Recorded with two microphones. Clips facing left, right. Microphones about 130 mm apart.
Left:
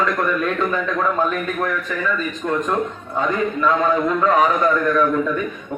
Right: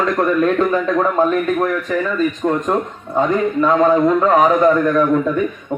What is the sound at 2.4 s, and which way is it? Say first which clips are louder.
A man's voice: right 3 dB; 30° right (ahead or behind).